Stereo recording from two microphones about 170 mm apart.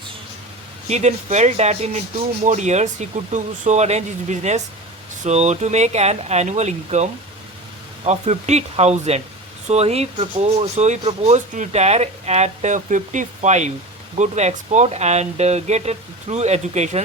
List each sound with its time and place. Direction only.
0.9 s speech: 40° right (ahead or behind)